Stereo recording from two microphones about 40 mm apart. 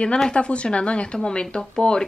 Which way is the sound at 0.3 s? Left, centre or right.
Left.